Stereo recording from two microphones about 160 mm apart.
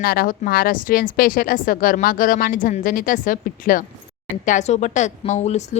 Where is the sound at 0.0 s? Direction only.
65° left (ahead or behind).